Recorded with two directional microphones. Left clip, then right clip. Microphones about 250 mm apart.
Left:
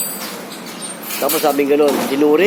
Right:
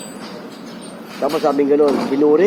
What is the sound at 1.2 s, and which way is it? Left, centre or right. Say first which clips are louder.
Speech: left 1 dB; centre.